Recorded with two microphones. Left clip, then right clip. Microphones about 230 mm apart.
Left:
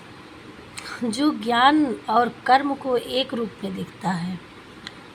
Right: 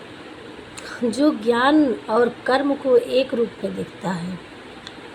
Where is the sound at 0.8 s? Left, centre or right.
Left.